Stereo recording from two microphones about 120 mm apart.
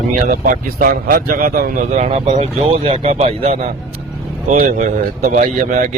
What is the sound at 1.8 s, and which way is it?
Speech, 70° right (ahead or behind).